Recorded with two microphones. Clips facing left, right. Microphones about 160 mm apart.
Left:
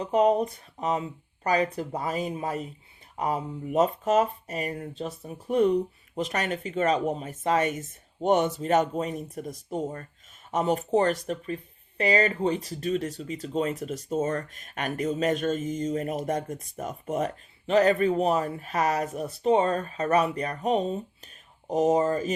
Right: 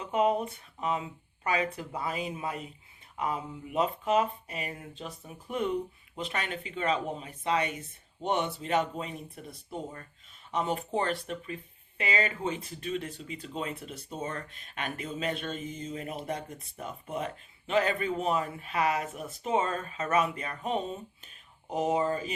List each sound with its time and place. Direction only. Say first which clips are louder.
0.0 s speech: left 5 dB; 40° left (ahead or behind)